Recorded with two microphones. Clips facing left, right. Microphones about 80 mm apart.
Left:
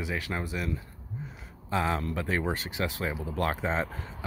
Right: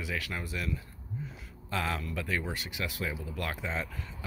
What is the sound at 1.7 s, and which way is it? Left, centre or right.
Speech, left.